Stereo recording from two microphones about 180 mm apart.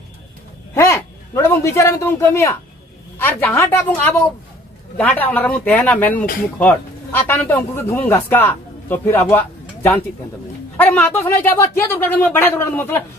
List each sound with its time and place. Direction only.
0.7 s a man's voice: 15° left (ahead or behind)
10.8 s a man's voice: 10° left (ahead or behind)